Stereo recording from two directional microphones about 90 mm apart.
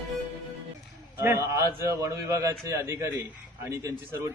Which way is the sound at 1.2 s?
30° right (ahead or behind).